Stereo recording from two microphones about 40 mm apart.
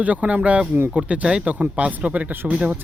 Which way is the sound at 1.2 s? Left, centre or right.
Right.